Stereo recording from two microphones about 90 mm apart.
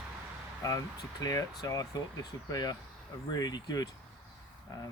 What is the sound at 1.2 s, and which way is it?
Speech, 40° left (ahead or behind).